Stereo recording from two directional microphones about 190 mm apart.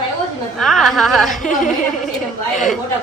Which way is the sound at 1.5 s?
40° left (ahead or behind).